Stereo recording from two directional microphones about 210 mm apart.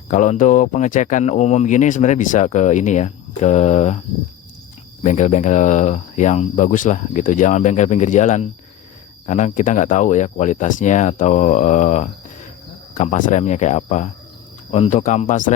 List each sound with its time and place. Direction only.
0.1 s speech: 35° left (ahead or behind)
5.0 s speech: 35° left (ahead or behind)